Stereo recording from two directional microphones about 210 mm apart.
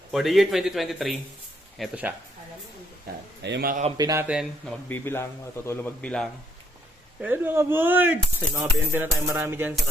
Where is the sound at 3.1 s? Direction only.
45° right (ahead or behind).